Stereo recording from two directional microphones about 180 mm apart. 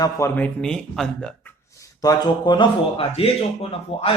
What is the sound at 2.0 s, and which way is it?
Speech, 20° left (ahead or behind).